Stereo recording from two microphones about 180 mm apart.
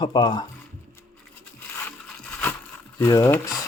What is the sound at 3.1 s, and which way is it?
Speech, 15° left (ahead or behind).